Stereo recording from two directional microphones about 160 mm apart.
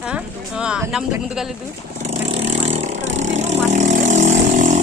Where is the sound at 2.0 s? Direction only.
40° right (ahead or behind).